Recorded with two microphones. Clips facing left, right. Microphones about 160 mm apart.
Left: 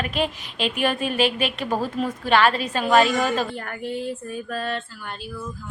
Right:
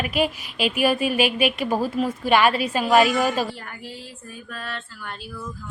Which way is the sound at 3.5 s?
55° left (ahead or behind).